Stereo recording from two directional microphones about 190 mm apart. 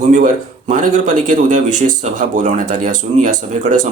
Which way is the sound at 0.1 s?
40° right (ahead or behind).